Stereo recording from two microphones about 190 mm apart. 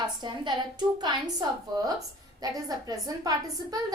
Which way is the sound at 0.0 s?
25° right (ahead or behind).